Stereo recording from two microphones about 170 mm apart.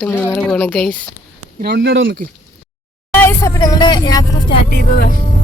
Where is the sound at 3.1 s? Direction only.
15° left (ahead or behind).